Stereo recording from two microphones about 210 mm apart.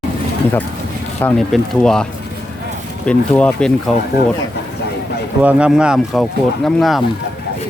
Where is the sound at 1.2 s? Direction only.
5° left (ahead or behind).